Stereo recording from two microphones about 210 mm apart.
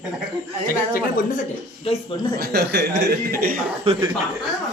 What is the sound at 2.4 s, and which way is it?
Speech, 50° right (ahead or behind).